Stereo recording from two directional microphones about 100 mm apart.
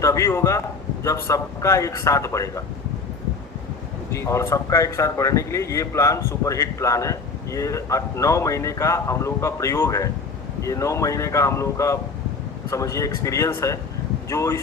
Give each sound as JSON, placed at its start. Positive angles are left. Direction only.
{"t": 0.0, "sound": "speech", "side_deg": 30}
{"t": 4.1, "sound": "speech", "side_deg": 30}